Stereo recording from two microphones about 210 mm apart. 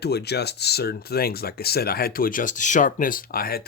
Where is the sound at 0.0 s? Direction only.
50° left (ahead or behind).